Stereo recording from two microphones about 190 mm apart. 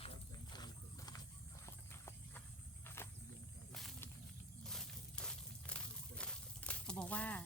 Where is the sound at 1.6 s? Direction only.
15° left (ahead or behind).